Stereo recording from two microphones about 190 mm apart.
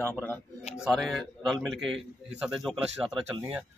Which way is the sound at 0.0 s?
10° left (ahead or behind).